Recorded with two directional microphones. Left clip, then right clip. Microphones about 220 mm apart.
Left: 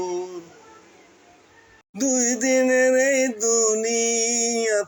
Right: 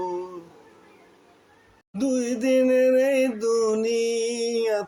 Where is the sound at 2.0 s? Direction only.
5° right (ahead or behind).